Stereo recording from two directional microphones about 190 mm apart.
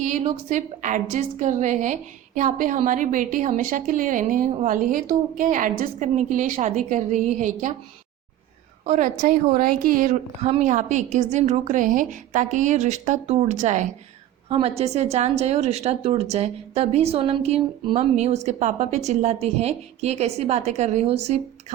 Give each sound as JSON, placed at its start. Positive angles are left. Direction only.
{"t": 0.0, "sound": "a woman's voice", "side_deg": -40}
{"t": 8.9, "sound": "a woman's voice", "side_deg": -45}